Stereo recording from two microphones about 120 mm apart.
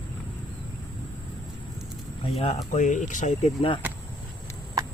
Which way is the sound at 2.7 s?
90° left.